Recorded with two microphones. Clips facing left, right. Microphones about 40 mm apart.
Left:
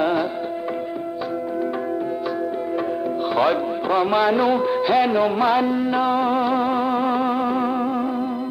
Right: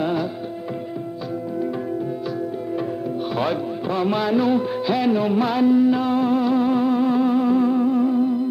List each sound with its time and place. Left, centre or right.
0.0 s music: centre
3.3 s music: centre